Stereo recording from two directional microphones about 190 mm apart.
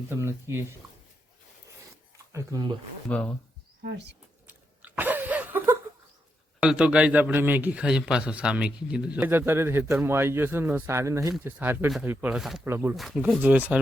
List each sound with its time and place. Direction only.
0.1 s a man's voice: 15° right (ahead or behind)
2.3 s speech: 20° right (ahead or behind)
3.1 s speech: 5° left (ahead or behind)
3.8 s speech: 65° right (ahead or behind)
4.4 s chewing: 10° right (ahead or behind)
6.6 s a man's voice: 5° right (ahead or behind)
12.6 s a man's voice: 10° right (ahead or behind)